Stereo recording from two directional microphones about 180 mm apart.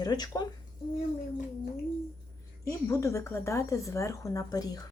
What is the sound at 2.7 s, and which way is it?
Speech, 15° left (ahead or behind).